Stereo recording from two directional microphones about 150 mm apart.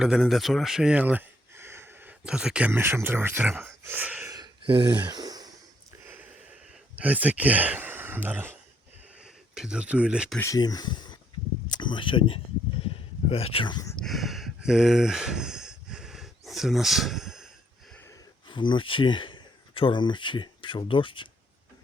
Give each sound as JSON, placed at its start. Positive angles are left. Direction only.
{"t": 0.0, "sound": "speech", "side_deg": -5}
{"t": 4.3, "sound": "a sound", "side_deg": -30}
{"t": 6.1, "sound": "a sound", "side_deg": -10}
{"t": 9.6, "sound": "speech", "side_deg": -5}
{"t": 10.4, "sound": "speech", "side_deg": 25}
{"t": 13.9, "sound": "sigh", "side_deg": 0}
{"t": 18.4, "sound": "speech", "side_deg": 30}